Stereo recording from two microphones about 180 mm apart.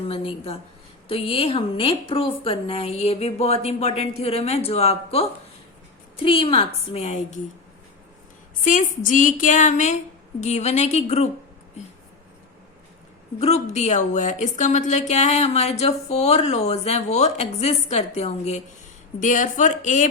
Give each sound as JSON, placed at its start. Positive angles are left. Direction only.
{"t": 0.1, "sound": "speech", "side_deg": 30}
{"t": 8.6, "sound": "a woman's voice", "side_deg": 45}
{"t": 13.4, "sound": "a woman's voice", "side_deg": 40}